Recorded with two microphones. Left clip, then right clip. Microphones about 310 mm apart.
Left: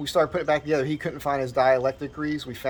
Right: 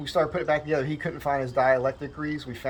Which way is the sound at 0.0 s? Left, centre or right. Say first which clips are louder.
Left 2 dB; centre.